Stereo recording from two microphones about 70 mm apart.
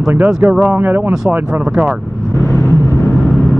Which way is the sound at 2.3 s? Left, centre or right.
Left.